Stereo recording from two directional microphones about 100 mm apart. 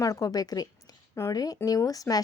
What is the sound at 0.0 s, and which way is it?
Speech, 35° left (ahead or behind).